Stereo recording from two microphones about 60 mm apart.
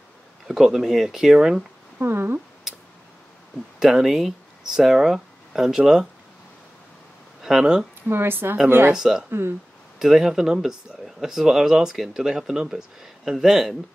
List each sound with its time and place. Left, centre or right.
0.5 s speech: centre
2.0 s a woman's voice: right
2.7 s a sound: centre
3.8 s speech: centre
7.4 s speech: centre
8.1 s a woman's voice: right
8.9 s speech: centre